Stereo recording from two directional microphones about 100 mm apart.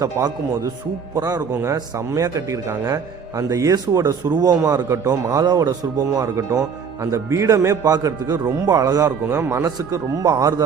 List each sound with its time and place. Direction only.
0.0 s a man's voice: 35° right (ahead or behind)
9.0 s speech: 25° right (ahead or behind)
9.6 s a man's voice: 40° right (ahead or behind)